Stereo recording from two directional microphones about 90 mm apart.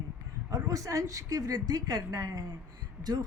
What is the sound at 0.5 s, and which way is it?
A woman's voice, 40° right (ahead or behind).